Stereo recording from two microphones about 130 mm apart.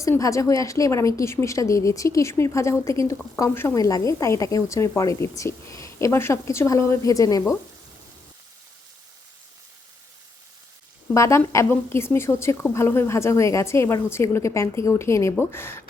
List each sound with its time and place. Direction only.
0.0 s a woman's voice: 25° left (ahead or behind)
11.1 s a woman's voice: 25° left (ahead or behind)